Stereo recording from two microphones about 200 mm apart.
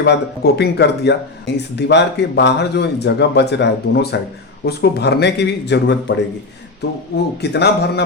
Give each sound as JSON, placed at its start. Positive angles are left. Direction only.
{"t": 0.0, "sound": "speech", "side_deg": 55}
{"t": 7.5, "sound": "speech", "side_deg": 55}